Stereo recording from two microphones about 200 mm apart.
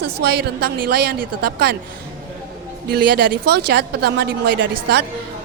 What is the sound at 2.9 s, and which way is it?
A woman's voice, 50° right (ahead or behind).